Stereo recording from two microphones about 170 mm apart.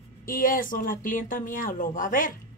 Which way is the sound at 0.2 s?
55° left (ahead or behind).